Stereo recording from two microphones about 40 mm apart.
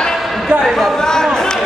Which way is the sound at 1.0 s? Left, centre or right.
Centre.